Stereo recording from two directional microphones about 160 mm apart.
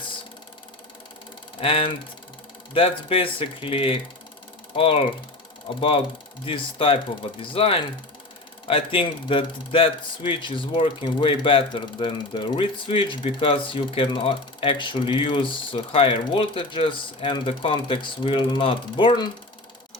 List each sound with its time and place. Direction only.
1.6 s a man's voice: 35° left (ahead or behind)